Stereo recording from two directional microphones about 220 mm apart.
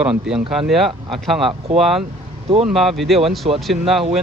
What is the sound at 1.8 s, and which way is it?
A man's voice, centre (ahead or behind).